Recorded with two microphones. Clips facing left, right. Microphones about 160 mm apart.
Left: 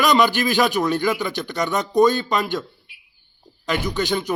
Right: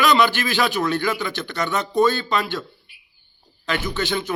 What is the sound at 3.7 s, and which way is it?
Speech, 10° left (ahead or behind).